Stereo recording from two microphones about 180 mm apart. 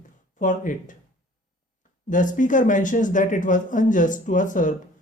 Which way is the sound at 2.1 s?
45° left (ahead or behind).